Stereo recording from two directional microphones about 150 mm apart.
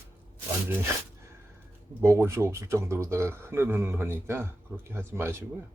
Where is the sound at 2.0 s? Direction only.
20° right (ahead or behind).